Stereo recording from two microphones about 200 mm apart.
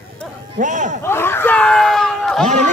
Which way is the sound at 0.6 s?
40° right (ahead or behind).